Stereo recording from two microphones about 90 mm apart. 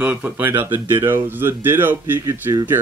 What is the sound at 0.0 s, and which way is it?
Speech, 15° right (ahead or behind).